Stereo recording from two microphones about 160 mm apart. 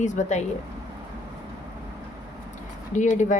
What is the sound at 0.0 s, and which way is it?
Speech, 50° left (ahead or behind).